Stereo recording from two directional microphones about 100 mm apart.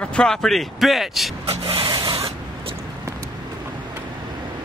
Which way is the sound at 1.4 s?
75° right (ahead or behind).